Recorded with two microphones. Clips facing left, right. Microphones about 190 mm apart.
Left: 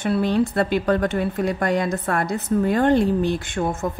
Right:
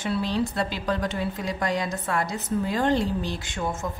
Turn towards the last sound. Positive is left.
turn(degrees=60)  # may be behind; listen again after turning